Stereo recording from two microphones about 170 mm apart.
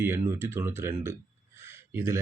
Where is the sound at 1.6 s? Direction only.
15° right (ahead or behind).